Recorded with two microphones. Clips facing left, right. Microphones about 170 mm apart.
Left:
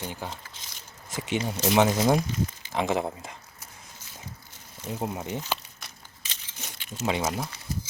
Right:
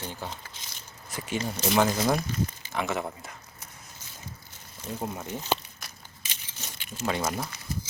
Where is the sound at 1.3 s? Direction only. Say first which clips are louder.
Left 2 dB; 20° left (ahead or behind).